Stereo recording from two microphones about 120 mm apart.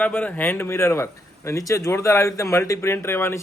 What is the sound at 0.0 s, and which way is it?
Speech, 15° left (ahead or behind).